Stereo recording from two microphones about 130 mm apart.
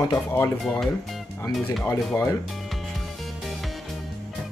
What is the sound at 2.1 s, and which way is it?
Speech, 10° left (ahead or behind).